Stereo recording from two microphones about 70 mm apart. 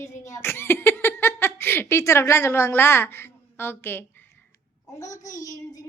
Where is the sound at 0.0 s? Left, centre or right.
Left.